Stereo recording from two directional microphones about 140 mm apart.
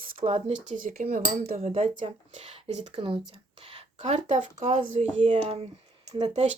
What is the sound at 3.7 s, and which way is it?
Speech, 50° right (ahead or behind).